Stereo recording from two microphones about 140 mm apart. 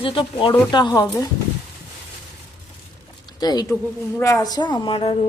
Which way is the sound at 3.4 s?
30° left (ahead or behind).